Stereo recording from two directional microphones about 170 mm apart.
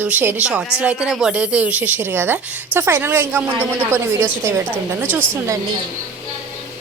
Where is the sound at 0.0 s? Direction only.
10° right (ahead or behind).